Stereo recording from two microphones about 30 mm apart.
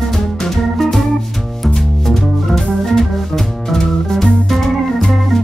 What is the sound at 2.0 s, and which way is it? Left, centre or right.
Organ, centre.